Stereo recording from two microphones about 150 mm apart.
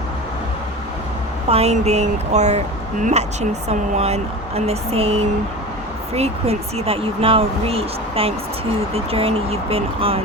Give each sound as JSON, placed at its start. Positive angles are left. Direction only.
{"t": 1.5, "sound": "speech", "side_deg": -40}